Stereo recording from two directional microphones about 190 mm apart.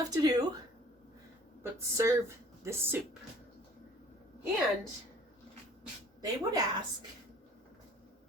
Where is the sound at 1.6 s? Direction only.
15° right (ahead or behind).